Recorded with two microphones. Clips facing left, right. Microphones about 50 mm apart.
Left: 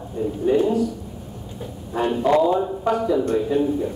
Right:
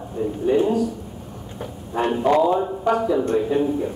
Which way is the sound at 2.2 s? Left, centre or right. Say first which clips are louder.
Even; right.